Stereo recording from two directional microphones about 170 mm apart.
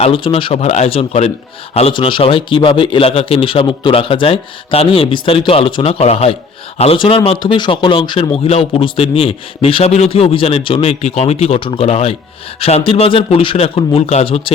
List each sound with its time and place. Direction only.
0.0 s a man's voice: 30° left (ahead or behind)